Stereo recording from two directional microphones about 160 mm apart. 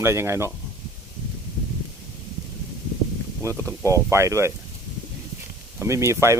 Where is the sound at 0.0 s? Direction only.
15° right (ahead or behind).